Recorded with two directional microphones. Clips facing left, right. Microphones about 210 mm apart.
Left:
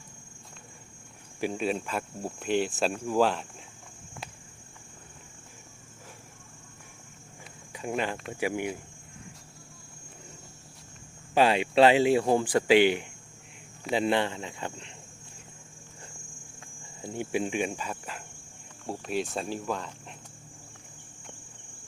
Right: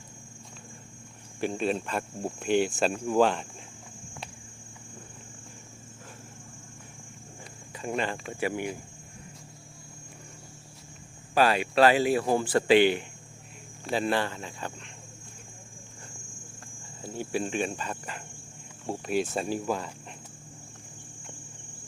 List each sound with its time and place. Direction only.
1.4 s speech: 5° left (ahead or behind)
7.7 s speech: 10° left (ahead or behind)
8.1 s speech: centre (ahead or behind)
8.4 s speech: 10° left (ahead or behind)
11.3 s speech: 20° left (ahead or behind)
17.0 s speech: 20° left (ahead or behind); by 19.9 s 5° right (ahead or behind)